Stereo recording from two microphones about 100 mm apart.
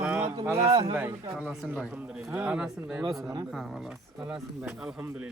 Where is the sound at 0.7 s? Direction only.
65° right (ahead or behind).